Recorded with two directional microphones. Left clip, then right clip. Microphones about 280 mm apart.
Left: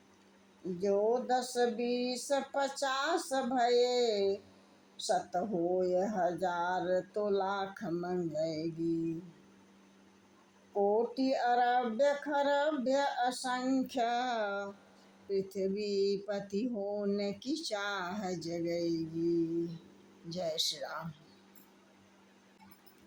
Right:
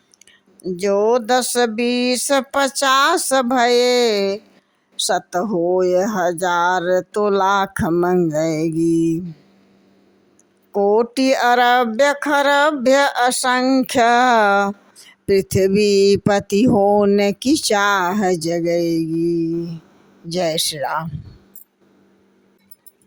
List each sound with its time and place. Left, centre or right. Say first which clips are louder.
0.8 s speech: right 14 dB; right
11.2 s speech: right 16 dB; right